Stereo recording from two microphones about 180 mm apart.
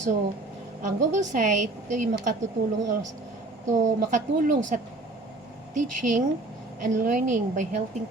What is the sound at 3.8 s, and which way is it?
A woman's voice, 45° right (ahead or behind).